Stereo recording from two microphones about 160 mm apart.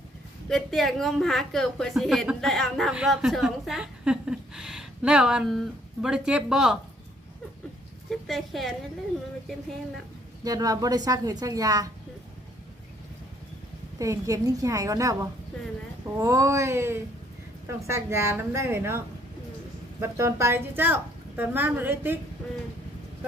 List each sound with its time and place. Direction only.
0.4 s a woman's voice: centre (ahead or behind)
8.1 s speech: centre (ahead or behind)
10.4 s a woman's voice: 20° right (ahead or behind)
14.0 s a woman's voice: 20° right (ahead or behind)